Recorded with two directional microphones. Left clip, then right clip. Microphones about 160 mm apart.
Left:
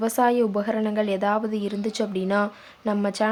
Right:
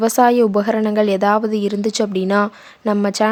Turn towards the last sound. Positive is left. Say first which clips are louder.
# right 7 dB
turn(degrees=-45)  # may be behind; listen again after turning